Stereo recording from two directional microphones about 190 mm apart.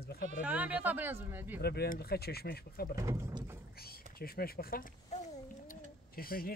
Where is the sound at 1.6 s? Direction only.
55° left (ahead or behind).